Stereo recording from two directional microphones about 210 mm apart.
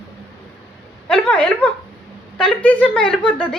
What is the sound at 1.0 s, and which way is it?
A woman's voice, 5° left (ahead or behind).